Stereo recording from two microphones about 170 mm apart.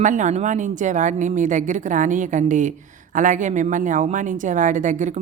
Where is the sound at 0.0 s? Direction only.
45° right (ahead or behind).